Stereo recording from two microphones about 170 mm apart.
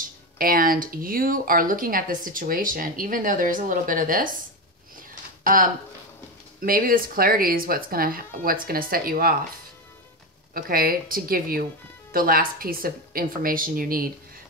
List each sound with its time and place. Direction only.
0.4 s speech: 55° right (ahead or behind)
5.4 s speech: 55° right (ahead or behind)
10.5 s speech: 60° right (ahead or behind)